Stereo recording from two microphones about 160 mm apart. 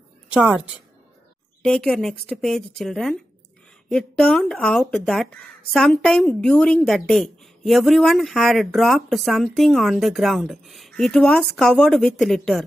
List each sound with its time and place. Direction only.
0.3 s a woman's voice: 5° right (ahead or behind)
1.6 s speech: 5° left (ahead or behind)